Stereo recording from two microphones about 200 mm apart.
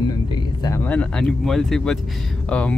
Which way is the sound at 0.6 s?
10° left (ahead or behind).